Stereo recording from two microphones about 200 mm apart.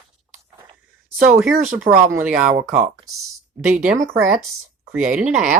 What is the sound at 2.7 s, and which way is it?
Speech, 35° right (ahead or behind).